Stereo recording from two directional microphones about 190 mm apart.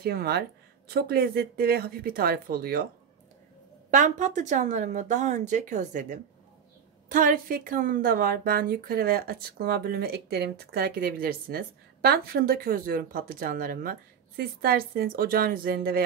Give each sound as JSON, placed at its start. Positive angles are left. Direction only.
{"t": 0.0, "sound": "a woman's voice", "side_deg": -55}
{"t": 3.9, "sound": "a woman's voice", "side_deg": -40}